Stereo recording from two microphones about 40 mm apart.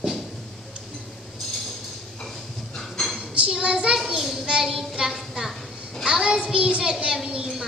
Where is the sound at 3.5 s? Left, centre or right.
Right.